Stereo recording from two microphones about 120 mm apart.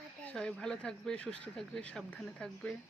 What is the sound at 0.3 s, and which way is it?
Speech, 5° left (ahead or behind).